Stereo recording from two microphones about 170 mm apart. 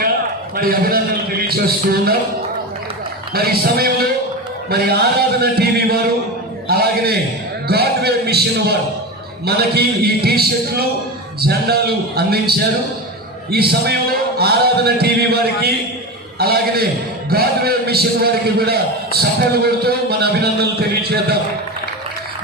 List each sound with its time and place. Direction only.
0.5 s a man's voice: 60° right (ahead or behind)
3.3 s a man's voice: 65° right (ahead or behind)